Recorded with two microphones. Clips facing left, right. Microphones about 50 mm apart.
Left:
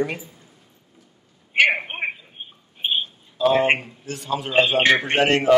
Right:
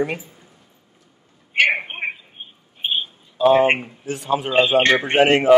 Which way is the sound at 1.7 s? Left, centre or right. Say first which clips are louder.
Right 1 dB; centre.